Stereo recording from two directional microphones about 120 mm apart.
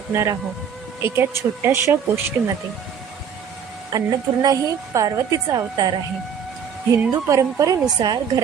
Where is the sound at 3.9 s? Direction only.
30° right (ahead or behind).